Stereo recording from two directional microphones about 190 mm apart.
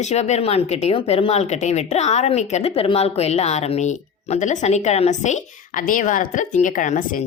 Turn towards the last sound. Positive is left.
turn(degrees=45)  # may be behind; listen again after turning